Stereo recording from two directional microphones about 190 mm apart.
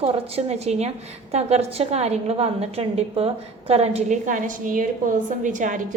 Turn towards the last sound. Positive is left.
turn(degrees=-40)  # may be behind; listen again after turning